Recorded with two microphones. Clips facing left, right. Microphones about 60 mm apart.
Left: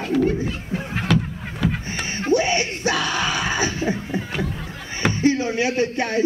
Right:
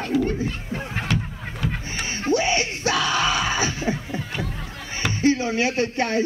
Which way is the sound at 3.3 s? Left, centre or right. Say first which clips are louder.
Left 1 dB; left.